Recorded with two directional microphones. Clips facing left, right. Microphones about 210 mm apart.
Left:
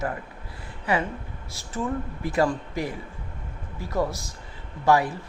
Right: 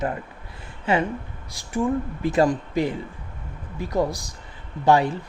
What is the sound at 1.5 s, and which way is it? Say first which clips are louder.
Speech: right 6 dB; 15° right (ahead or behind).